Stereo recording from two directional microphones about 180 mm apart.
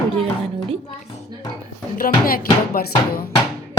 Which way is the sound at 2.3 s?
55° left (ahead or behind).